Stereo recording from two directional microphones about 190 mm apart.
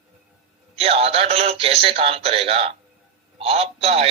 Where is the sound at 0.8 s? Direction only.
30° right (ahead or behind).